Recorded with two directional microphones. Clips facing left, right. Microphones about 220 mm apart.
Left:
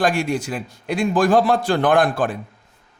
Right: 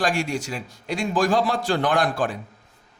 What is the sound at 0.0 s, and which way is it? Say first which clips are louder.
A man's voice: left 4 dB; 55° left (ahead or behind).